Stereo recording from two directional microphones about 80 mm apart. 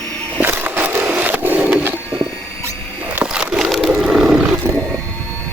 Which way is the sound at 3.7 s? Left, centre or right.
Centre.